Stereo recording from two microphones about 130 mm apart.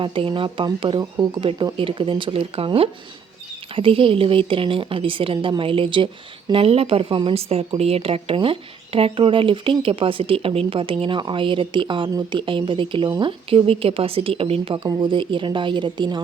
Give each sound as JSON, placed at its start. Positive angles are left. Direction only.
{"t": 0.0, "sound": "speech", "side_deg": -40}
{"t": 13.5, "sound": "speech", "side_deg": -45}